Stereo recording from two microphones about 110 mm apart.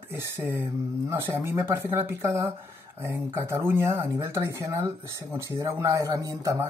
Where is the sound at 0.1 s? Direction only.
20° right (ahead or behind).